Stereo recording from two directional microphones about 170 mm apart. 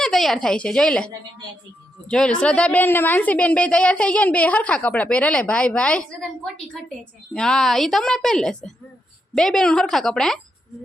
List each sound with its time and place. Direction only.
0.0 s a woman's voice: centre (ahead or behind)